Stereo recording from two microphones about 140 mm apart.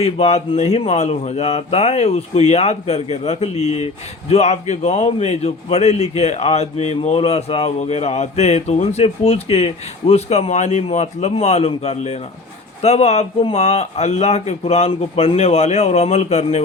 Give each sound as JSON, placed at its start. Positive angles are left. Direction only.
{"t": 0.0, "sound": "a man's voice", "side_deg": 50}